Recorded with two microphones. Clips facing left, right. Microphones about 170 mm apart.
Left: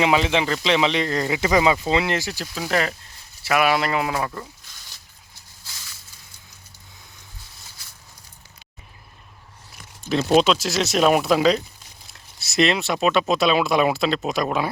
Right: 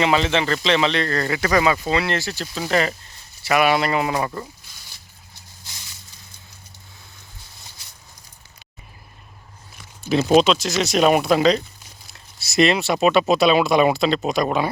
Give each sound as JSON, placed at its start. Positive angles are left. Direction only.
{"t": 0.0, "sound": "speech", "side_deg": 10}
{"t": 2.5, "sound": "speech", "side_deg": 0}
{"t": 5.7, "sound": "a sound", "side_deg": -25}
{"t": 10.0, "sound": "speech", "side_deg": -5}